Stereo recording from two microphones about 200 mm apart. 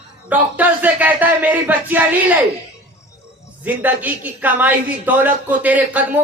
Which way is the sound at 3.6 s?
10° right (ahead or behind).